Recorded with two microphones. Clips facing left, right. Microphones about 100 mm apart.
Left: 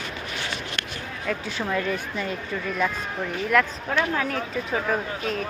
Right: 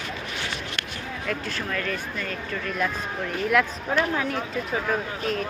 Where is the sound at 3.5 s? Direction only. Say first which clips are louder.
Left 1 dB; 5° right (ahead or behind).